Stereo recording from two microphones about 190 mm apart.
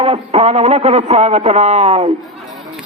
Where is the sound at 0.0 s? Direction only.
30° right (ahead or behind).